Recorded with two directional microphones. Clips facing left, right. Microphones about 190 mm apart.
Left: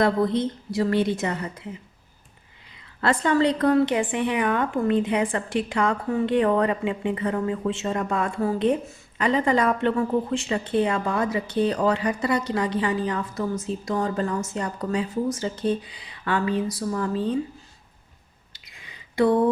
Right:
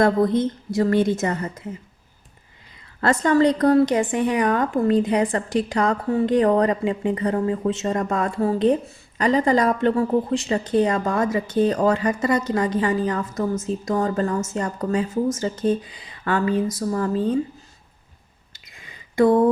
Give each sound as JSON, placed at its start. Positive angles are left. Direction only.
{"t": 0.0, "sound": "a woman's voice", "side_deg": -45}
{"t": 3.0, "sound": "a woman's voice", "side_deg": -45}
{"t": 18.5, "sound": "a sound", "side_deg": -45}